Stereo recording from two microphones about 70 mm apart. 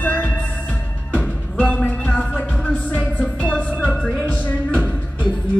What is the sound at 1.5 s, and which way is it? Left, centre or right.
Music, left.